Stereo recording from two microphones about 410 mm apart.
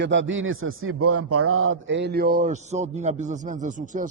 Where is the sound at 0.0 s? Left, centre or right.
Right.